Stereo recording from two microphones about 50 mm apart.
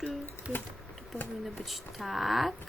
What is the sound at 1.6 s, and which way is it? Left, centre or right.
Speech, centre.